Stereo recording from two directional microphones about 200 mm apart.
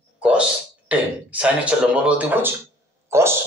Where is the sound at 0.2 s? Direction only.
5° right (ahead or behind).